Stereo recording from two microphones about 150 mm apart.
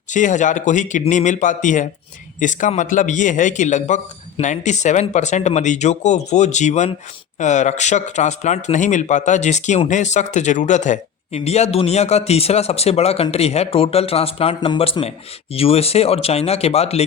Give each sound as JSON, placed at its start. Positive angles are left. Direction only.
{"t": 0.1, "sound": "a man's voice", "side_deg": 55}